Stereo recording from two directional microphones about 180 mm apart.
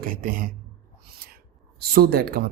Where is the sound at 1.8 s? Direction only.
55° right (ahead or behind).